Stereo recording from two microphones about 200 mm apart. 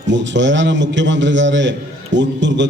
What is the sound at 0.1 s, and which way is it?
A man's voice, 65° right (ahead or behind).